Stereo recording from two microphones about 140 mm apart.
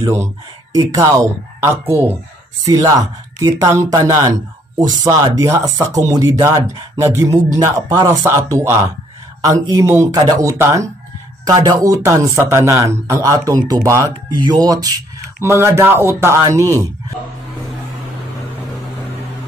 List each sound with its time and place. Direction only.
0.0 s speech: 20° right (ahead or behind)